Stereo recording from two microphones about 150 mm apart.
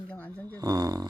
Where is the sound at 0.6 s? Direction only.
25° right (ahead or behind).